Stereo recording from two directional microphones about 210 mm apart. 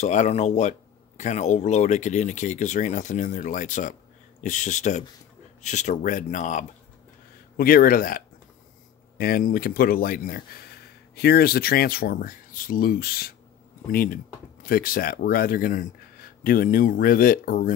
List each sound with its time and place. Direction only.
0.0 s speech: 35° left (ahead or behind)
9.2 s speech: 45° left (ahead or behind)